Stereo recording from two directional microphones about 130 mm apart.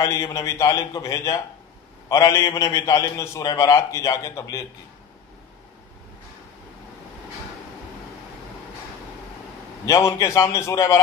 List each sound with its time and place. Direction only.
0.0 s a man's voice: 25° left (ahead or behind)
9.8 s a man's voice: 25° left (ahead or behind)